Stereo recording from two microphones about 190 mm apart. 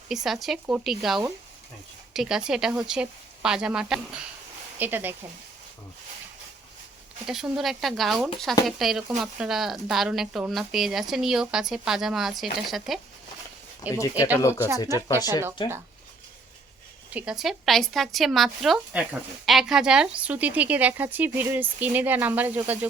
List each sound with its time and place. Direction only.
0.1 s speech: centre (ahead or behind)
7.3 s speech: 5° right (ahead or behind)
14.3 s speech: 10° left (ahead or behind)
17.2 s speech: 5° right (ahead or behind)